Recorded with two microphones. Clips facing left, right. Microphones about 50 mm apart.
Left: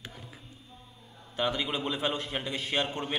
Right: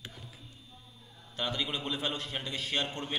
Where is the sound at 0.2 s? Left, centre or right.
Left.